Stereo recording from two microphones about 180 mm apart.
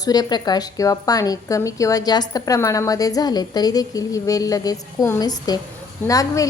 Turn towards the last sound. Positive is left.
turn(degrees=20)  # may be behind; listen again after turning